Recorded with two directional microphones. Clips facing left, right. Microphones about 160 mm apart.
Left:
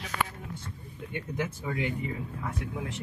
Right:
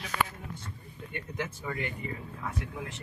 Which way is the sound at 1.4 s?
10° left (ahead or behind).